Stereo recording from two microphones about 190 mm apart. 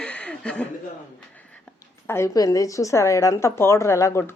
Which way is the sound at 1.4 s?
10° left (ahead or behind).